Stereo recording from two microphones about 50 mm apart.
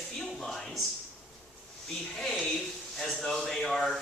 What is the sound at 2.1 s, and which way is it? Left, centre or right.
Speech, centre.